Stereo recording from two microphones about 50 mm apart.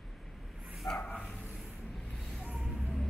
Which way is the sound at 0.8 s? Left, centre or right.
Left.